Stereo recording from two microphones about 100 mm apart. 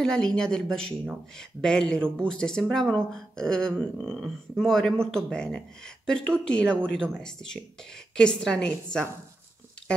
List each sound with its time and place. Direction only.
0.0 s a woman's voice: 5° left (ahead or behind)
2.0 s speech: 20° right (ahead or behind)
2.2 s a woman's voice: 5° left (ahead or behind)